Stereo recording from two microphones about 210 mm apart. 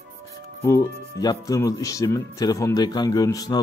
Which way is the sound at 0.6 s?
15° left (ahead or behind).